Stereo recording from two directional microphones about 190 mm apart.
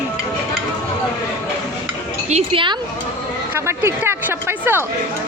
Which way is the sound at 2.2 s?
30° right (ahead or behind).